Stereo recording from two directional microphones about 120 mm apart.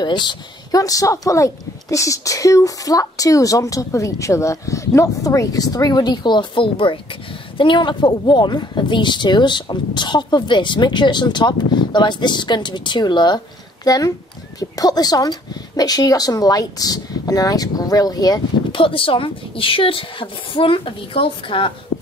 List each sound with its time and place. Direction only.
0.0 s a woman's voice: 40° left (ahead or behind)
18.8 s a woman's voice: 50° left (ahead or behind)